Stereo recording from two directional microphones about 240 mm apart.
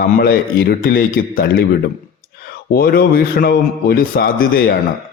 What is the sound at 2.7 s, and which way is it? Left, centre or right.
A man's voice, left.